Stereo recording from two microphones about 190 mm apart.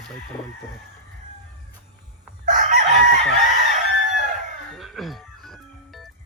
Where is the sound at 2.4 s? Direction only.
45° right (ahead or behind).